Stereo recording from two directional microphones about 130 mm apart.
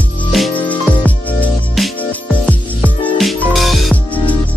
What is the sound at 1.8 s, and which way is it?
Music, centre (ahead or behind).